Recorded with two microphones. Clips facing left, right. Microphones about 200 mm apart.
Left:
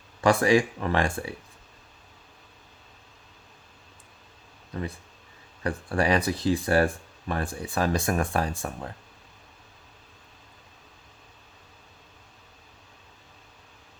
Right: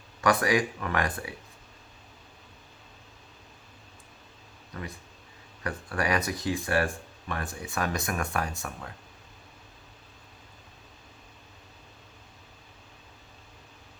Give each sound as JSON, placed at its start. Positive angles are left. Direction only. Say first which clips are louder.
{"t": 0.2, "sound": "speech", "louder": "left 4 dB", "side_deg": 30}
{"t": 5.6, "sound": "speech", "louder": "left 5 dB", "side_deg": 30}